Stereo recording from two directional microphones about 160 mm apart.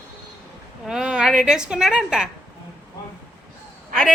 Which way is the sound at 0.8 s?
5° right (ahead or behind).